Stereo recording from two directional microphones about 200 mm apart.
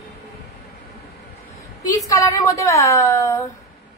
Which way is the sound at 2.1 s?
15° left (ahead or behind).